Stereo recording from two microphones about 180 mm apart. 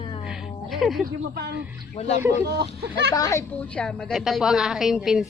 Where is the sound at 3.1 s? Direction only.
20° left (ahead or behind).